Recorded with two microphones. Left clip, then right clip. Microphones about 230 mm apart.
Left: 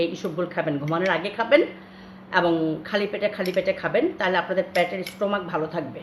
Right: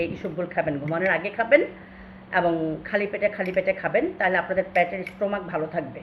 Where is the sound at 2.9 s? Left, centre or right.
Left.